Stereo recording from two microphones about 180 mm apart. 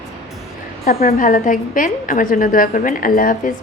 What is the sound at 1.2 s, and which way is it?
A woman's voice, 50° left (ahead or behind).